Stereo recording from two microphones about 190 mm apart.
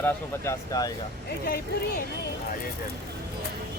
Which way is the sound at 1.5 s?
50° left (ahead or behind).